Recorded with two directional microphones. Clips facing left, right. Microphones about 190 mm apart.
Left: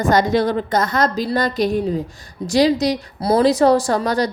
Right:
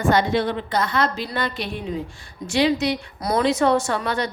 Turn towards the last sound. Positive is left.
turn(degrees=40)  # may be behind; listen again after turning